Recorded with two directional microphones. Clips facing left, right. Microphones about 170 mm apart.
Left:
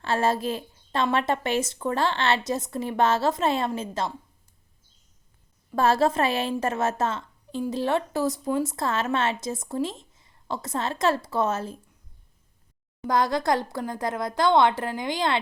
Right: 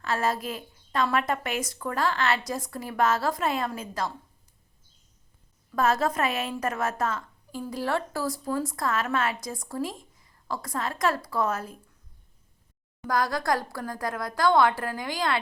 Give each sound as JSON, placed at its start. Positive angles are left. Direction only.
{"t": 0.0, "sound": "a woman's voice", "side_deg": 30}
{"t": 5.7, "sound": "a woman's voice", "side_deg": 30}
{"t": 13.1, "sound": "a woman's voice", "side_deg": 20}